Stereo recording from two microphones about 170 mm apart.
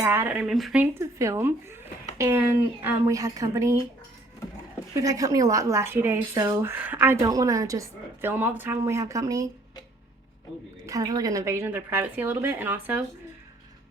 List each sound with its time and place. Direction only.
0.0 s a woman's voice: 15° right (ahead or behind)
0.9 s a woman's voice: 15° right (ahead or behind)
4.9 s speech: 20° right (ahead or behind)
10.8 s a woman's voice: 20° right (ahead or behind)